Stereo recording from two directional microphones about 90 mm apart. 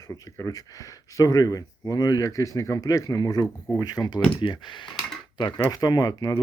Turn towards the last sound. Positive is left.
turn(degrees=40)  # may be behind; listen again after turning